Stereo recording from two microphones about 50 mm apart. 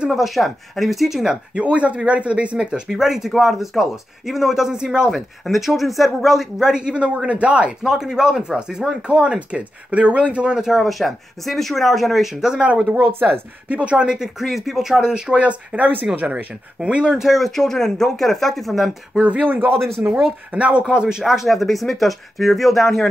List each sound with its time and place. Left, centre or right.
0.1 s speech: centre
1.5 s speech: right
2.9 s speech: centre
5.4 s speech: centre; by 7.7 s right
7.8 s speech: centre
10.8 s speech: centre
13.2 s speech: right; by 14.3 s centre
14.4 s speech: centre
15.3 s speech: right
16.8 s speech: right
17.2 s speech: centre
19.2 s speech: right
20.8 s speech: centre
21.2 s speech: centre